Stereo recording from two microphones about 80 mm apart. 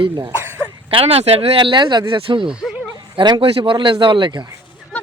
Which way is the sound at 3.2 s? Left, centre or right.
Right.